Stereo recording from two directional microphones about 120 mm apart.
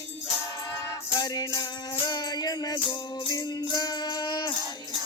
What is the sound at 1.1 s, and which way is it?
Music, 35° left (ahead or behind).